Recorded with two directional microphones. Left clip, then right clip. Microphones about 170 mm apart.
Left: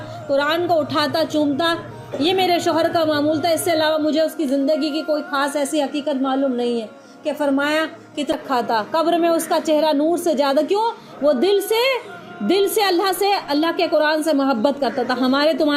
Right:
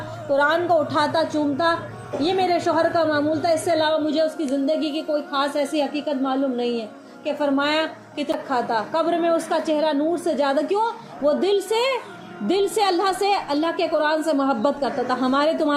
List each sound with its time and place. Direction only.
0.3 s a woman's voice: 35° left (ahead or behind)